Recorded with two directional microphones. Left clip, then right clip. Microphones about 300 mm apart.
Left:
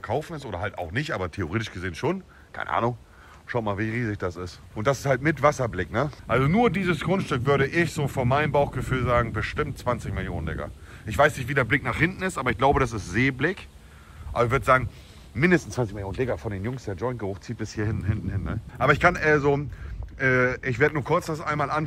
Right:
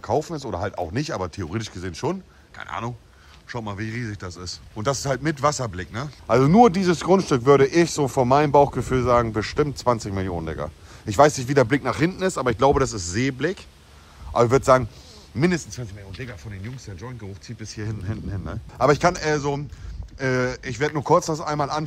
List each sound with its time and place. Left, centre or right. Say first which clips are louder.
0.0 s speech: right 5 dB; centre
6.2 s speech: right 8 dB; centre
14.3 s speech: right 4 dB; centre
15.5 s speech: left 6 dB; centre